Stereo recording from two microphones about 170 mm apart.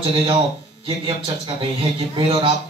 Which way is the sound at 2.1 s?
30° right (ahead or behind).